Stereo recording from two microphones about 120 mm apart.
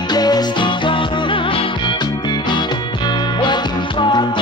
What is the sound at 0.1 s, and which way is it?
Music, 35° left (ahead or behind).